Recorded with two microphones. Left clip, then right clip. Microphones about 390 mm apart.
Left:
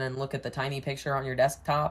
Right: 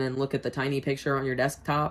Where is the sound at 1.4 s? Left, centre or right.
Left.